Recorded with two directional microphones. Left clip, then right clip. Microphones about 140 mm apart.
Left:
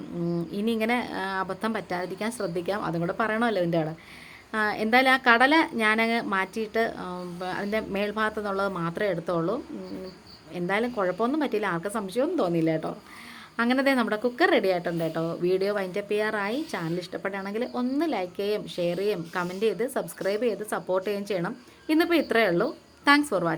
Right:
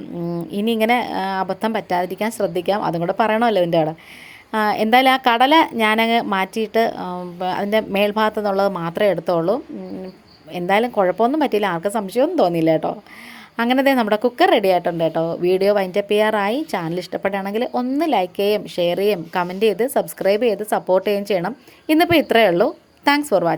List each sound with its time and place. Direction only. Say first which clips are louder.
0.5 s a woman's voice: right 10 dB; 35° right (ahead or behind)